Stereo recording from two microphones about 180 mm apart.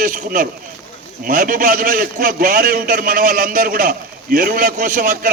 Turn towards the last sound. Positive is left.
turn(degrees=-50)  # may be behind; listen again after turning